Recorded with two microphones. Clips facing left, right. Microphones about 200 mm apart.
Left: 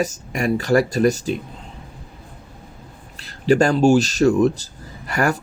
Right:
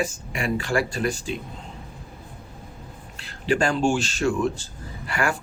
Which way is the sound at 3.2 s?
40° left (ahead or behind).